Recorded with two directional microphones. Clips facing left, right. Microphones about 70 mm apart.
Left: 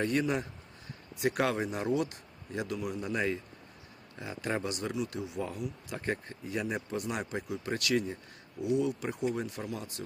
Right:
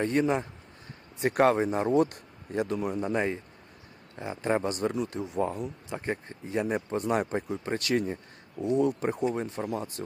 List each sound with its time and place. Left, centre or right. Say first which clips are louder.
0.0 s speech: right 4 dB; right